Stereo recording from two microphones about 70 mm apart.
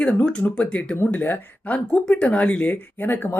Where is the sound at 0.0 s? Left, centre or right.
Centre.